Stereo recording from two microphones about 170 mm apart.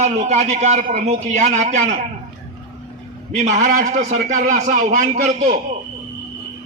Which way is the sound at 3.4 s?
45° right (ahead or behind).